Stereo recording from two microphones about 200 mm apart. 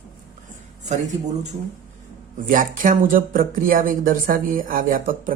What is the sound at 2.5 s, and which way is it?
Speech, 40° right (ahead or behind).